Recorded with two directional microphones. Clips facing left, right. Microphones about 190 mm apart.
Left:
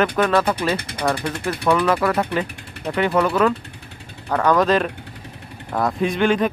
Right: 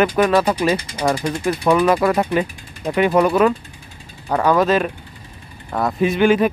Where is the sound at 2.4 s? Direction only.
65° left (ahead or behind).